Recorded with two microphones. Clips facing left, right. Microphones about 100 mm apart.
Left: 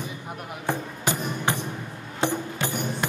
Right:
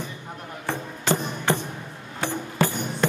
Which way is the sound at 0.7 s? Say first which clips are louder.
Right 2 dB; 15° left (ahead or behind).